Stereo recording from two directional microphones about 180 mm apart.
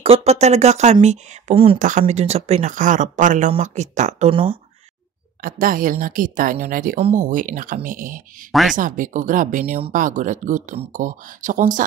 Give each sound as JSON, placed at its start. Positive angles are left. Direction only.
{"t": 0.0, "sound": "speech", "side_deg": -35}
{"t": 1.8, "sound": "speech", "side_deg": -45}
{"t": 4.3, "sound": "speech", "side_deg": -30}
{"t": 5.4, "sound": "speech", "side_deg": -50}
{"t": 7.0, "sound": "speech", "side_deg": -35}
{"t": 7.2, "sound": "speech", "side_deg": -45}
{"t": 8.5, "sound": "speech", "side_deg": 0}
{"t": 8.7, "sound": "speech", "side_deg": -45}